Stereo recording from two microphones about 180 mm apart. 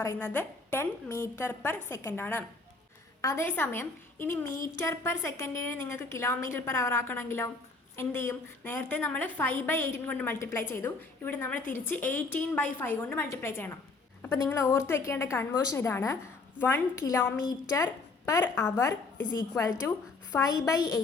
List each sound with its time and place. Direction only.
0.0 s a woman's voice: 15° left (ahead or behind)